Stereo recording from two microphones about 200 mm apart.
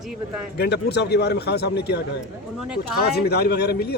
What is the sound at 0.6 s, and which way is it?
A man's voice, 55° left (ahead or behind).